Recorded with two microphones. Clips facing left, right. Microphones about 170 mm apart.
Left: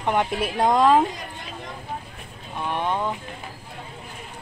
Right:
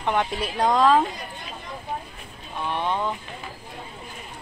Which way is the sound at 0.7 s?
20° left (ahead or behind).